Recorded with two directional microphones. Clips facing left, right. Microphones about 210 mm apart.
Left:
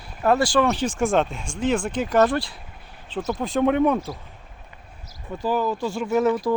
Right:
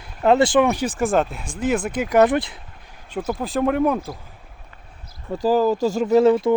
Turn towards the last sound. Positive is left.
turn(degrees=-25)  # may be behind; listen again after turning